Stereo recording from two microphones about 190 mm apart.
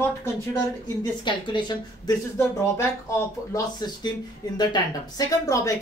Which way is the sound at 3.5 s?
20° left (ahead or behind).